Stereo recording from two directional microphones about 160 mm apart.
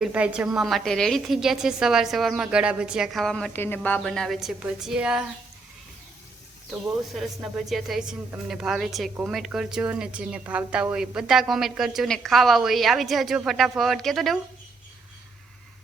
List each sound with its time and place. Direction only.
0.0 s a woman's voice: 10° right (ahead or behind)
7.1 s a woman's voice: centre (ahead or behind)